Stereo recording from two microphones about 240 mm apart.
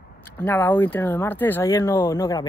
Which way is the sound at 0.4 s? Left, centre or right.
Centre.